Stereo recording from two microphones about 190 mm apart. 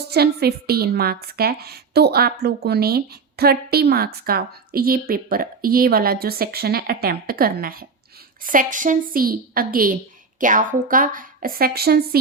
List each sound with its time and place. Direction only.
0.1 s a woman's voice: 55° right (ahead or behind)